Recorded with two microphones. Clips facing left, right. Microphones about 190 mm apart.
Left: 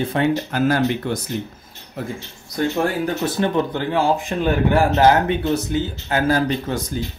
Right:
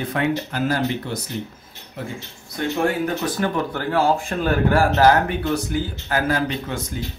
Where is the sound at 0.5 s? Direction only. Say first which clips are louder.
Left 4 dB; 50° left (ahead or behind).